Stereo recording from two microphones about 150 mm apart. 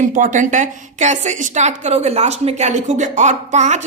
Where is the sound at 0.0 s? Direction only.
60° right (ahead or behind).